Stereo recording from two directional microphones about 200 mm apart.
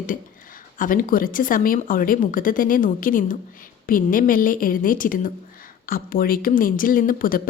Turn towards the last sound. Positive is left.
turn(degrees=45)  # may be behind; listen again after turning